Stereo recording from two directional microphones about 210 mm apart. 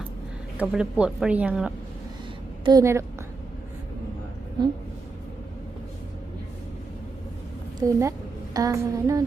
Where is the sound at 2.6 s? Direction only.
20° right (ahead or behind).